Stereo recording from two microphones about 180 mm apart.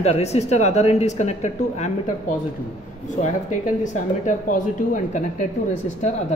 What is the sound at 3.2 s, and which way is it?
Speech, 45° left (ahead or behind).